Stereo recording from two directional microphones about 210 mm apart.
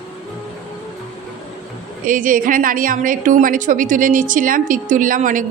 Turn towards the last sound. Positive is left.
turn(degrees=-40)  # may be behind; listen again after turning